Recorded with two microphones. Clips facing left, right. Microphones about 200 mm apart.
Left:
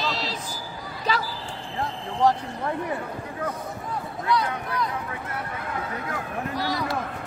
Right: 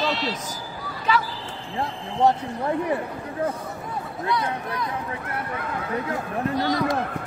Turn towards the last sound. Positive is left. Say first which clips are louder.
# right 5 dB
turn(degrees=-20)  # may be behind; listen again after turning